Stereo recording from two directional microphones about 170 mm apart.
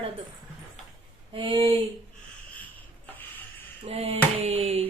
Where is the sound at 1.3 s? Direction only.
30° right (ahead or behind).